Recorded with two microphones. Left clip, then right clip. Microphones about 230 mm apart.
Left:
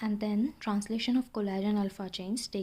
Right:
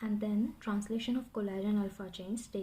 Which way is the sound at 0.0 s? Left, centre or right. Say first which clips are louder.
Left 3 dB; left.